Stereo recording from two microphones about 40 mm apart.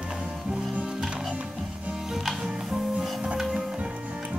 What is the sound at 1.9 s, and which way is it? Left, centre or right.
Music, centre.